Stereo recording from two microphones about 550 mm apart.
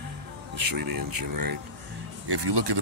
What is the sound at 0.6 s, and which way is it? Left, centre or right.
Speech, right.